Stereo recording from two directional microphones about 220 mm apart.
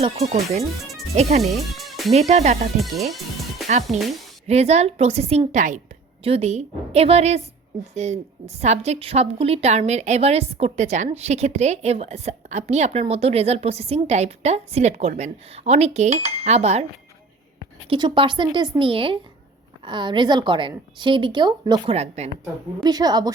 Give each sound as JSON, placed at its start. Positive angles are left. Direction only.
{"t": 1.1, "sound": "a woman's voice", "side_deg": -30}
{"t": 1.7, "sound": "music", "side_deg": 0}
{"t": 2.1, "sound": "a woman's voice", "side_deg": -30}
{"t": 2.8, "sound": "speech", "side_deg": 0}
{"t": 4.4, "sound": "a woman's voice", "side_deg": -30}
{"t": 17.8, "sound": "a woman's voice", "side_deg": -25}
{"t": 22.8, "sound": "a woman's voice", "side_deg": -20}